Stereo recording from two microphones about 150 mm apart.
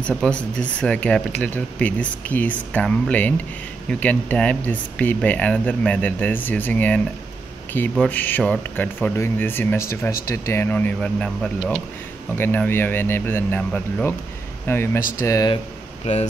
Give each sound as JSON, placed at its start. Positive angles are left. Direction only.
{"t": 0.0, "sound": "speech", "side_deg": 5}